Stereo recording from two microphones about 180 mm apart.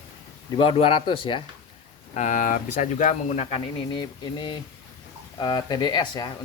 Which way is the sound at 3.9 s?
25° left (ahead or behind).